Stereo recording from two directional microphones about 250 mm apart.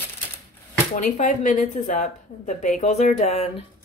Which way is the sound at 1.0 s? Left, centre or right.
Left.